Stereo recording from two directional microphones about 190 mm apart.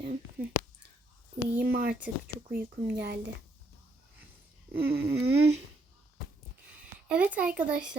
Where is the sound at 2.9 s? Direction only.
60° right (ahead or behind).